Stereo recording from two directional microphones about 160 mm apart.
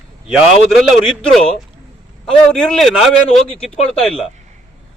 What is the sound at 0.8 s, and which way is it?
A man's voice, centre (ahead or behind).